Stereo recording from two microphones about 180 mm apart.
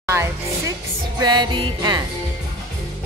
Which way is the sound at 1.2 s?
25° right (ahead or behind).